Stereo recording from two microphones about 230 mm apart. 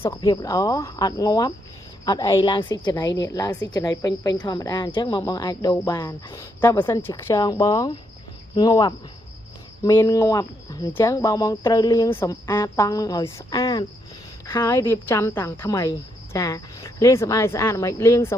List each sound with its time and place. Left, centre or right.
0.1 s a woman's voice: centre